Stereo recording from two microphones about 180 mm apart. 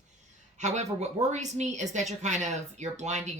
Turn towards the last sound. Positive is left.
turn(degrees=-40)  # may be behind; listen again after turning